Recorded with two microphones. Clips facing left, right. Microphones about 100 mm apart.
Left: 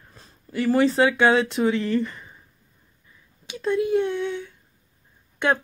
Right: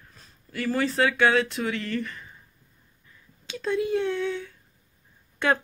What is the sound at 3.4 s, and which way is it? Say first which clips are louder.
Speech: left 3 dB; 15° left (ahead or behind).